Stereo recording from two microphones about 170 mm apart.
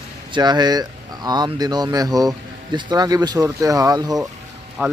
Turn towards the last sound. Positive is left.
turn(degrees=-10)  # may be behind; listen again after turning